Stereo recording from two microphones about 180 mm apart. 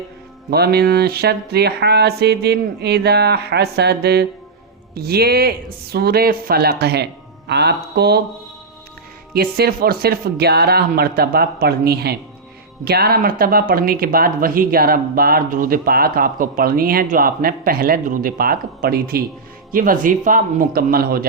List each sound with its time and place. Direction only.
0.5 s speech: 60° right (ahead or behind)
9.3 s speech: 60° right (ahead or behind)